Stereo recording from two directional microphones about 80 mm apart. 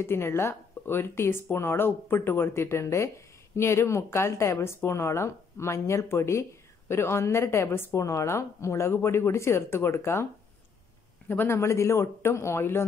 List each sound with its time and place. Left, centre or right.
0.0 s speech: left
11.2 s speech: left